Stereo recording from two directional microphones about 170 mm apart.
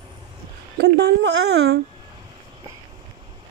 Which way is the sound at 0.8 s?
70° right (ahead or behind).